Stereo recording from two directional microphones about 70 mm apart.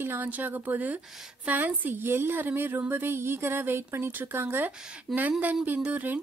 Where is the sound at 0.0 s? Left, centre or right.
Right.